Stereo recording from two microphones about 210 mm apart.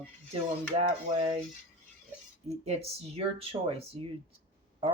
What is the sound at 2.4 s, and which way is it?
Speech, 30° right (ahead or behind).